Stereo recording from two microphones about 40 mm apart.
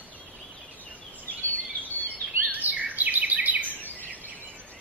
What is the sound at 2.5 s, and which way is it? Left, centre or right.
Bird vocalization, right.